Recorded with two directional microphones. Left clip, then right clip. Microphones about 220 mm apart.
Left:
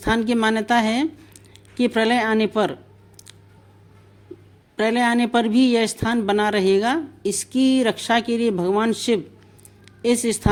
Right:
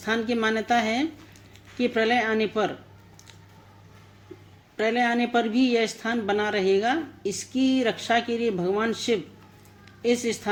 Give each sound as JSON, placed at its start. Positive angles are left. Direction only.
{"t": 0.0, "sound": "speech", "side_deg": 50}
{"t": 4.8, "sound": "speech", "side_deg": 55}